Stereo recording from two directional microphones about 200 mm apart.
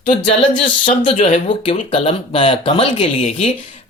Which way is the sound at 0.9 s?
35° left (ahead or behind).